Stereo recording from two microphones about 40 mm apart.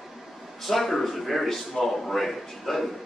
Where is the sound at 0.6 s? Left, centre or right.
Centre.